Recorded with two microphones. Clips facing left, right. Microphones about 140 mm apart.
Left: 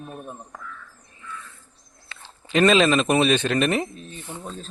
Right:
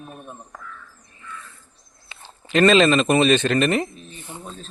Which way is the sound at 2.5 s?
5° left (ahead or behind).